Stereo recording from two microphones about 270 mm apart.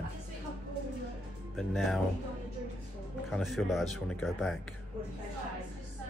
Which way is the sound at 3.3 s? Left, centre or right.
Centre.